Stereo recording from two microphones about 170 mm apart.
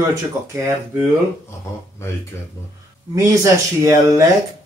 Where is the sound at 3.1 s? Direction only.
15° right (ahead or behind).